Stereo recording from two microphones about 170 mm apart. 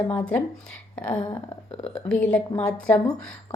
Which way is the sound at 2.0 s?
5° left (ahead or behind).